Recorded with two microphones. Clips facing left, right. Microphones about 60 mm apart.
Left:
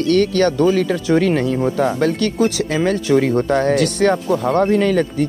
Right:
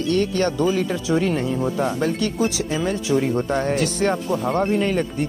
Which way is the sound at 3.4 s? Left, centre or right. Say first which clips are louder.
Left 5 dB; left.